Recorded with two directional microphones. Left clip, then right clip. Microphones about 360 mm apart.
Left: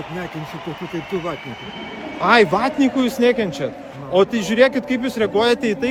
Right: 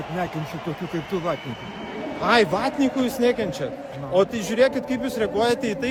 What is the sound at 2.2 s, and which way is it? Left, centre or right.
A man's voice, centre.